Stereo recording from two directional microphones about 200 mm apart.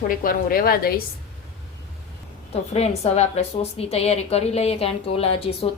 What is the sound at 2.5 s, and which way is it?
A woman's voice, 30° left (ahead or behind).